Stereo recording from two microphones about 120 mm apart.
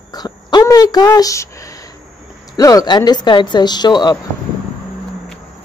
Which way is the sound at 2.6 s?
30° left (ahead or behind).